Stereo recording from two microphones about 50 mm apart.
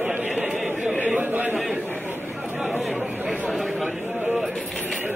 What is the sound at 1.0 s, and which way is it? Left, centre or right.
Chatter, right.